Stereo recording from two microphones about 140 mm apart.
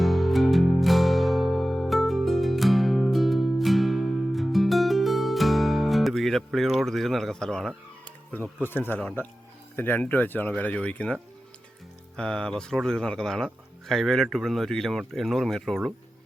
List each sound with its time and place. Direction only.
0.0 s music: centre (ahead or behind)
8.0 s a sound: 10° left (ahead or behind)
8.7 s speech: 15° left (ahead or behind)